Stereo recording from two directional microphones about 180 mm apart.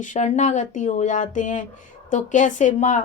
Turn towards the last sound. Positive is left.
turn(degrees=45)  # may be behind; listen again after turning